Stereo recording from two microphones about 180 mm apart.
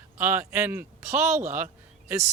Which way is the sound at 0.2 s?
10° right (ahead or behind).